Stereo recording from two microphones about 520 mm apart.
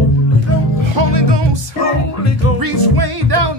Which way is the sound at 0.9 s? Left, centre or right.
Right.